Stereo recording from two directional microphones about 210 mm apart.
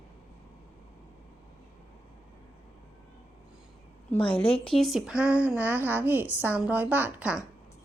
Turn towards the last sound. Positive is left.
turn(degrees=-5)  # may be behind; listen again after turning